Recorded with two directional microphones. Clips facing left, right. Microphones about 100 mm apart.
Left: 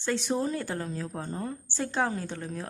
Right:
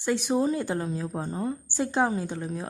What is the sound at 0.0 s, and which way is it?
A woman's voice, 15° right (ahead or behind).